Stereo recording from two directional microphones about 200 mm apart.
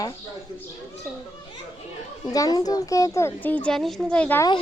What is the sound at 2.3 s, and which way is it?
A woman's voice, 20° left (ahead or behind).